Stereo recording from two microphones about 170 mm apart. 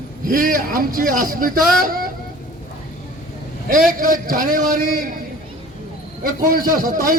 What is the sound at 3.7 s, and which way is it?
A man's voice, 55° right (ahead or behind).